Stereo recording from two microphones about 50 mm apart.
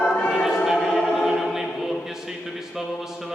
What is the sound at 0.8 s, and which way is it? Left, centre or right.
Music, centre.